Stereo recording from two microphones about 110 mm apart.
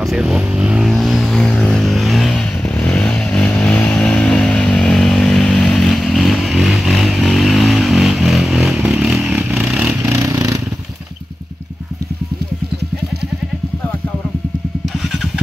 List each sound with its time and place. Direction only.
0.0 s vehicle: 5° right (ahead or behind)
10.0 s vehicle: 30° right (ahead or behind)